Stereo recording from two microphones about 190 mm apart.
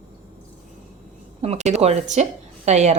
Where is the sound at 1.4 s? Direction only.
35° right (ahead or behind).